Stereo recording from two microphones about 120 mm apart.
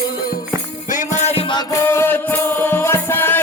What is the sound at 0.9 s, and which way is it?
Music, 85° left.